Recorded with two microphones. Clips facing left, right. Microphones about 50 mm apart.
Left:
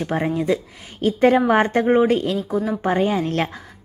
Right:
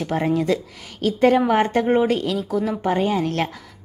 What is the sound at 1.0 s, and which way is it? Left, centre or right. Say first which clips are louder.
A woman's voice: left 1 dB; left.